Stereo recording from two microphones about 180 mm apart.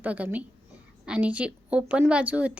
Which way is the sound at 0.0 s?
10° right (ahead or behind).